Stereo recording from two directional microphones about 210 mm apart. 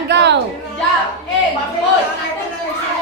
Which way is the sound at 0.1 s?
55° right (ahead or behind).